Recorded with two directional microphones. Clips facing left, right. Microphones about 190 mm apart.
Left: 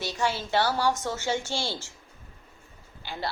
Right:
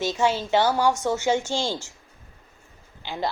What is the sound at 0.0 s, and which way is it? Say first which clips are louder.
A woman's voice: right 6 dB; 15° right (ahead or behind).